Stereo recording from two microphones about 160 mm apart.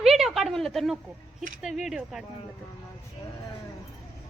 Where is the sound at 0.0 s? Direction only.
Centre (ahead or behind).